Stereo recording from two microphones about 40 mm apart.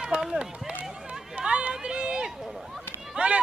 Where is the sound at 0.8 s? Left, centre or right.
Centre.